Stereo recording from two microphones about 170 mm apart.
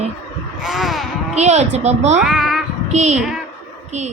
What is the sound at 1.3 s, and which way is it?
Speech, 40° right (ahead or behind).